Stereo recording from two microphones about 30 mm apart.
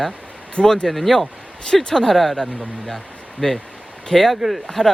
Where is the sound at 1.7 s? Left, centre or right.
Centre.